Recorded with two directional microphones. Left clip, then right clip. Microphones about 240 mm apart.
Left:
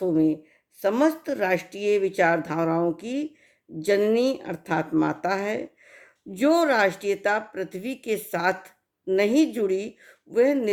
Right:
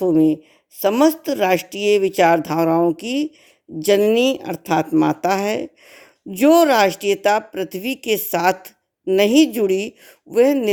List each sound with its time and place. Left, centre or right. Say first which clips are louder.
0.0 s speech: right 7 dB; right